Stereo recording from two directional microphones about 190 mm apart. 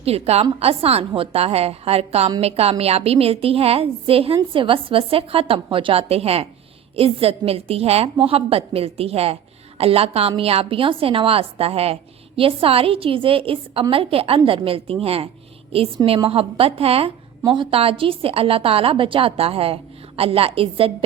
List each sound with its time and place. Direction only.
0.0 s a woman's voice: 35° right (ahead or behind)